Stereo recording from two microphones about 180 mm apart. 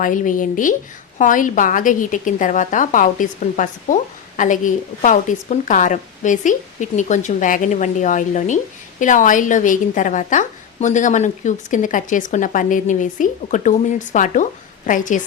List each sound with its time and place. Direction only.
0.0 s a woman's voice: 45° left (ahead or behind)